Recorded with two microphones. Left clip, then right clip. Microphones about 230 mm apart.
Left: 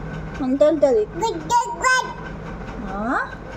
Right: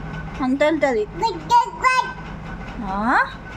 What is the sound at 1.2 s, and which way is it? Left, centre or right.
Child singing, centre.